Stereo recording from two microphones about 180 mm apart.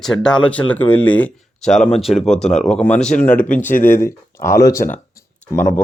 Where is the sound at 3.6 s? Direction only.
50° left (ahead or behind).